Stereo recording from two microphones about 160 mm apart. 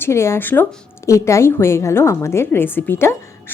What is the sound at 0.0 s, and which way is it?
A woman's voice, 15° left (ahead or behind).